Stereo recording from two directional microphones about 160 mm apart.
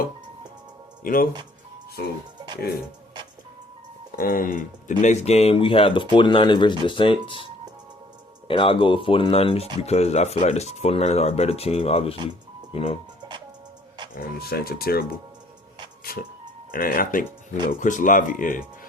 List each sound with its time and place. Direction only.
1.0 s speech: 60° left (ahead or behind)
4.2 s speech: 60° left (ahead or behind); by 7.4 s 35° left (ahead or behind)
8.4 s speech: 30° left (ahead or behind)
14.3 s speech: 75° left (ahead or behind)
16.7 s speech: 60° left (ahead or behind)